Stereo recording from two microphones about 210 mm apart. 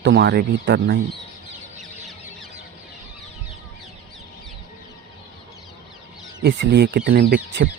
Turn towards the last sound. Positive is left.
turn(degrees=-45)  # may be behind; listen again after turning